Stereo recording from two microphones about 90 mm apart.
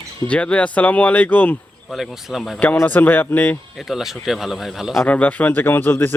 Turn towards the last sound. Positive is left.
turn(degrees=20)  # may be behind; listen again after turning